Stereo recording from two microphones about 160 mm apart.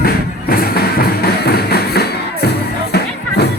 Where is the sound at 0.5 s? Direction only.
70° left (ahead or behind).